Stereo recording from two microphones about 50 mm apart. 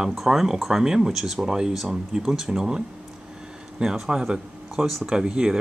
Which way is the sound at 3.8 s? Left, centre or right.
Centre.